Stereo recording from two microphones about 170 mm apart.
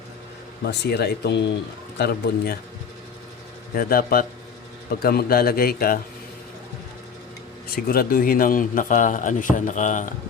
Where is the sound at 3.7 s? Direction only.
60° left (ahead or behind).